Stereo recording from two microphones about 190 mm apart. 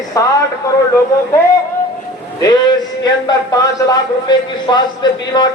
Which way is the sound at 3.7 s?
20° left (ahead or behind).